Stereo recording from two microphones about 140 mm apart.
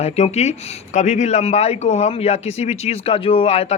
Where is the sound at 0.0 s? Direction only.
50° left (ahead or behind).